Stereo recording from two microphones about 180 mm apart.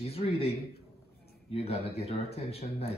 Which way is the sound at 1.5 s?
35° left (ahead or behind).